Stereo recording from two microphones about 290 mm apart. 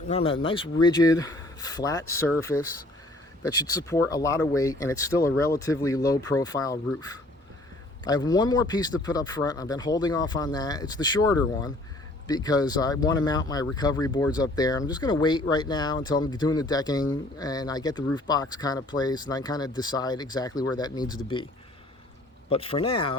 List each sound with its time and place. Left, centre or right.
0.1 s speech: centre
3.4 s speech: centre
22.4 s speech: centre